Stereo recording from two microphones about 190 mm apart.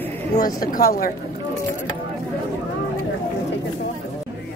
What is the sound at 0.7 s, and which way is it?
Speech, 50° left (ahead or behind).